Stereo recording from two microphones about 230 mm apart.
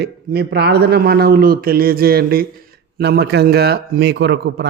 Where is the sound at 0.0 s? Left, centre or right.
Right.